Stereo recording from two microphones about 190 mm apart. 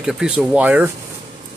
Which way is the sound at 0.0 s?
Centre (ahead or behind).